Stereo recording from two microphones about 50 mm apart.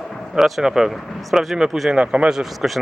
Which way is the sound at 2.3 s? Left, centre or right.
Centre.